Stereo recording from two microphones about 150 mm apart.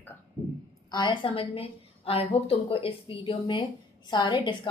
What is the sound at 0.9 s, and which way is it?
A woman's voice, 30° left (ahead or behind).